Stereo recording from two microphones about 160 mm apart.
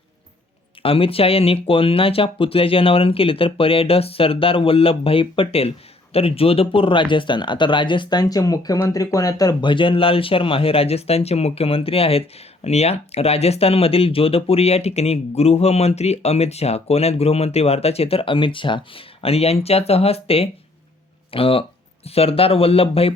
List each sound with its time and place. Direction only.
0.8 s speech: 35° left (ahead or behind)